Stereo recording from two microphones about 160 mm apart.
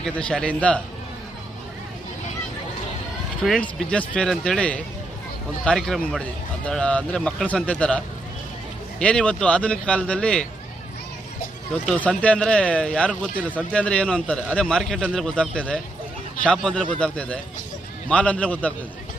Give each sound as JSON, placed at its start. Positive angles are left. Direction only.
{"t": 0.2, "sound": "speech", "side_deg": 5}
{"t": 3.4, "sound": "speech", "side_deg": 5}
{"t": 11.7, "sound": "speech", "side_deg": 10}